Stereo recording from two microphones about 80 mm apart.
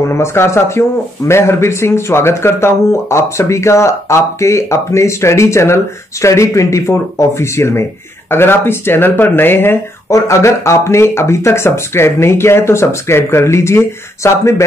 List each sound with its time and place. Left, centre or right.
0.1 s a man's voice: left
10.0 s a man's voice: left